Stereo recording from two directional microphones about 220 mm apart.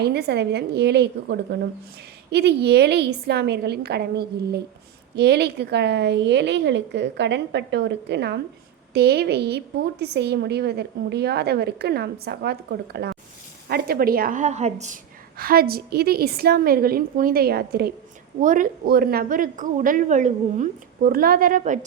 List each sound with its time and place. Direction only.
0.0 s a woman's voice: 45° right (ahead or behind); by 14.9 s 30° right (ahead or behind)
15.4 s a woman's voice: 40° right (ahead or behind)